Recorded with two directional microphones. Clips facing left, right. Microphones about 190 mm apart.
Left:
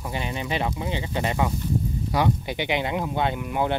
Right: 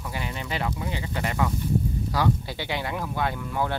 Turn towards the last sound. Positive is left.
turn(degrees=20)  # may be behind; listen again after turning